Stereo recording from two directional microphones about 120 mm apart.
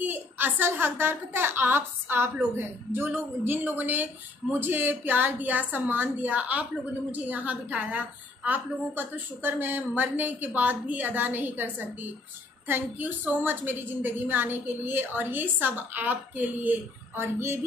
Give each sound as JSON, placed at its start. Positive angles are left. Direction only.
{"t": 0.0, "sound": "a woman's voice", "side_deg": -15}